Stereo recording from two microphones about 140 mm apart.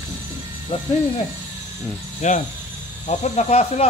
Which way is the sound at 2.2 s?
55° left (ahead or behind).